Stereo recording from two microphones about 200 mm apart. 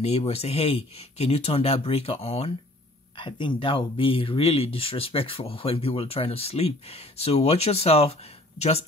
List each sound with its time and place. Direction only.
0.0 s speech: 30° left (ahead or behind)